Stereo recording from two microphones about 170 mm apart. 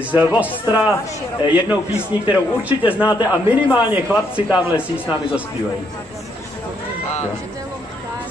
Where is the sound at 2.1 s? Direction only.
30° left (ahead or behind).